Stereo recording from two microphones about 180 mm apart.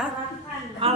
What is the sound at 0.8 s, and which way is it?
Speech, 30° right (ahead or behind).